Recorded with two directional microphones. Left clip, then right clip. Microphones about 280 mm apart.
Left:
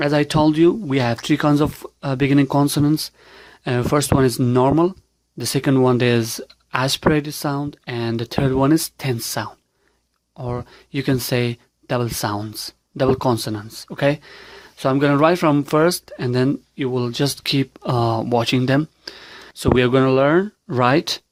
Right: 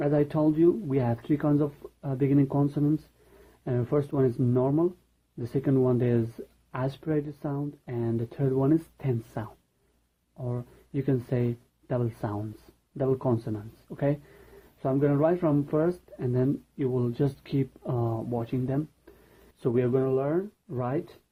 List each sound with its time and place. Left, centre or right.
0.0 s speech: left